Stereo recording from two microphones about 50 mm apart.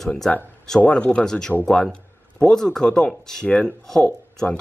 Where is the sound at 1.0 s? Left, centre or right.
Left.